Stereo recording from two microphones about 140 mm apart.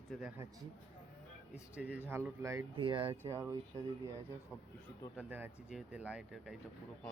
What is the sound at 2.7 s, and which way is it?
Speech, 35° right (ahead or behind).